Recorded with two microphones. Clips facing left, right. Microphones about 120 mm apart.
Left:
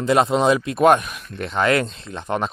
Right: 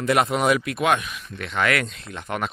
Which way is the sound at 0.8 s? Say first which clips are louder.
Left 7 dB; 40° left (ahead or behind).